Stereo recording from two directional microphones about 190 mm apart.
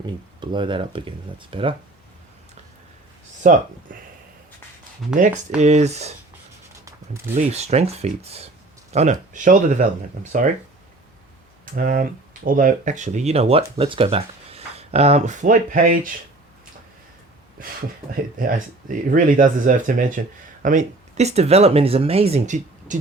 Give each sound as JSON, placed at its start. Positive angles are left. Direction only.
{"t": 0.0, "sound": "speech", "side_deg": -25}
{"t": 3.4, "sound": "speech", "side_deg": -40}
{"t": 5.1, "sound": "speech", "side_deg": -40}
{"t": 6.8, "sound": "a sound", "side_deg": -15}
{"t": 7.3, "sound": "speech", "side_deg": -35}
{"t": 11.6, "sound": "speech", "side_deg": -45}
{"t": 17.6, "sound": "speech", "side_deg": -45}